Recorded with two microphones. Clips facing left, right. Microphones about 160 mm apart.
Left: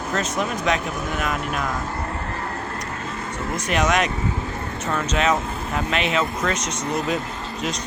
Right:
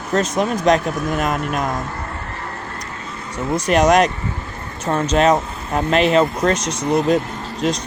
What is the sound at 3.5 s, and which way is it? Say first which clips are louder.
Speech: right 7 dB; 40° right (ahead or behind).